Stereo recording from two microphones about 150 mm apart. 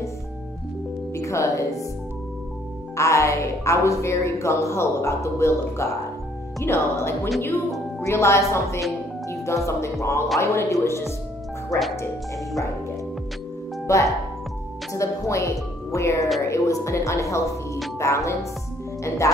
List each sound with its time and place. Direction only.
1.1 s speech: 20° left (ahead or behind)
3.0 s speech: 20° left (ahead or behind)
13.8 s speech: 20° left (ahead or behind)